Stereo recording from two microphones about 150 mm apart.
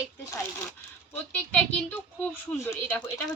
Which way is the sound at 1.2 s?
10° left (ahead or behind).